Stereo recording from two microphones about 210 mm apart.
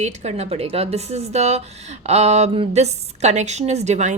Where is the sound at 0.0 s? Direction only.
30° right (ahead or behind).